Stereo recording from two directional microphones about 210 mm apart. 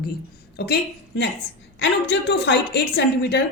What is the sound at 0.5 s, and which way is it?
A woman's voice, 50° left (ahead or behind).